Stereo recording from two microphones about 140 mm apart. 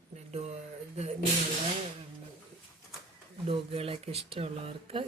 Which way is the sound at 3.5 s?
45° right (ahead or behind).